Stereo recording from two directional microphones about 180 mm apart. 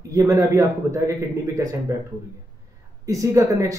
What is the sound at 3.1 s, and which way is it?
Speech, 15° right (ahead or behind).